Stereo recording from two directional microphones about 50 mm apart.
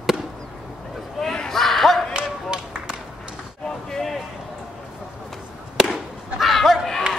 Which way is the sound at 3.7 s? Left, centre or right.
Centre.